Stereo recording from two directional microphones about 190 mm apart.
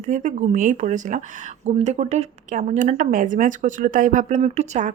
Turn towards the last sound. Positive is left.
turn(degrees=-35)  # may be behind; listen again after turning